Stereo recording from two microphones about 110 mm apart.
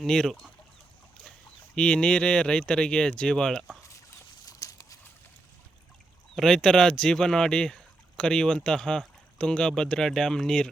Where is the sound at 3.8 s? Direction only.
30° left (ahead or behind).